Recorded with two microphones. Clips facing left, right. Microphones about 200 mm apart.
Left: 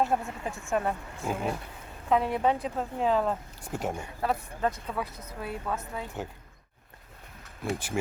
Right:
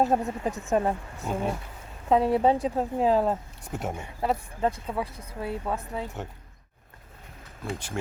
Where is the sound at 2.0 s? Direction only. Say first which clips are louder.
Right 4 dB; 30° right (ahead or behind).